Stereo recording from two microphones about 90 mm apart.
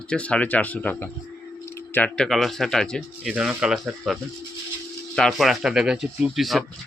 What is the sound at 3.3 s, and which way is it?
Speech, 5° right (ahead or behind).